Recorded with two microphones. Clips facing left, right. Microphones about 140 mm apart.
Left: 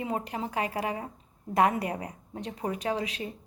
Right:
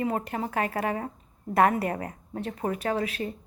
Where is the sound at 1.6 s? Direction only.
15° left (ahead or behind).